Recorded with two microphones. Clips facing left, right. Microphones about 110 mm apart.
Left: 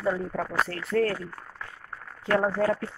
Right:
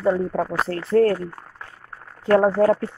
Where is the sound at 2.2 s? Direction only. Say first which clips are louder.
Right 8 dB; 40° right (ahead or behind).